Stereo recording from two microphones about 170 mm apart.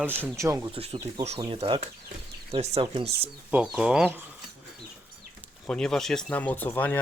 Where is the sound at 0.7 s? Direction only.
35° right (ahead or behind).